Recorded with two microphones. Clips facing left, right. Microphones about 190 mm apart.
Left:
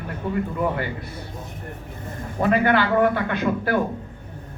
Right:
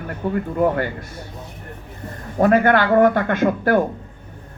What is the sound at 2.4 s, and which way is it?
Speech, 45° right (ahead or behind).